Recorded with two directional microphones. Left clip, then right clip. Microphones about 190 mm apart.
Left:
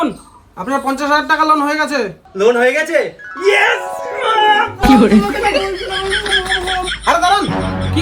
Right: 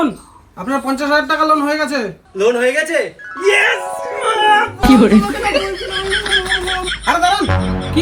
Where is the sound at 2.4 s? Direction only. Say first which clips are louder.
Left 2 dB; 30° left (ahead or behind).